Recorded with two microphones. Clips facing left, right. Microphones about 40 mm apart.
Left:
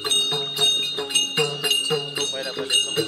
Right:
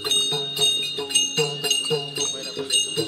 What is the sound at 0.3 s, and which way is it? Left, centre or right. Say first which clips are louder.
Jingle bell: left 1 dB; centre.